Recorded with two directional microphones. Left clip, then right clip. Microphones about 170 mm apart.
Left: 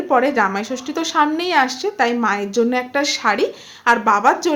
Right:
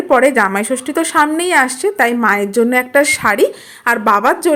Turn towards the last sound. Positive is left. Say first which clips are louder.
# right 2 dB
turn(degrees=-35)  # may be behind; listen again after turning